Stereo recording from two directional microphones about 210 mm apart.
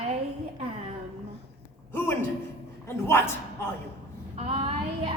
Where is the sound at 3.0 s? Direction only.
10° left (ahead or behind).